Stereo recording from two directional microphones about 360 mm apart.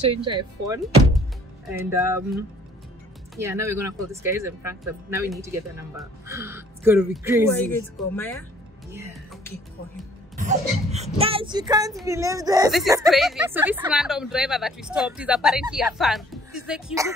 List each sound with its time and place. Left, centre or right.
0.0 s speech: centre
10.3 s cough: centre
11.1 s speech: centre